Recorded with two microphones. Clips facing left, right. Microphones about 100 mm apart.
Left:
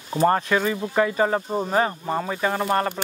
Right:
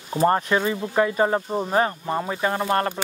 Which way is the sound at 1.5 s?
Centre (ahead or behind).